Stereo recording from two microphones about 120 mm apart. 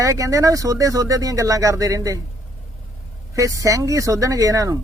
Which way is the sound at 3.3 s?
30° right (ahead or behind).